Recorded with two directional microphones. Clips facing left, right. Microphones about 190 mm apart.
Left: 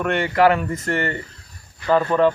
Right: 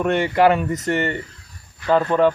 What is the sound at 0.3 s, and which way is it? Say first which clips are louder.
A man's voice: left 1 dB; 20° right (ahead or behind).